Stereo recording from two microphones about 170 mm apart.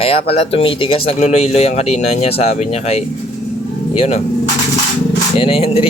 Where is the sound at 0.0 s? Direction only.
35° left (ahead or behind).